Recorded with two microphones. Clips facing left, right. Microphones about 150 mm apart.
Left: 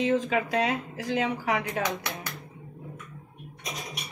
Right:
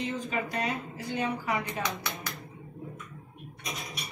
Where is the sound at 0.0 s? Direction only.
90° left.